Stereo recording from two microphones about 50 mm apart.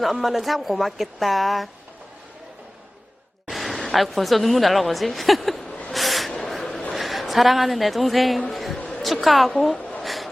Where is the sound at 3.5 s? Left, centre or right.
Centre.